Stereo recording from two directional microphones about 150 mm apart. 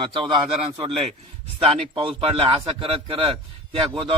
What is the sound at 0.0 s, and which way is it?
Speech, 35° right (ahead or behind).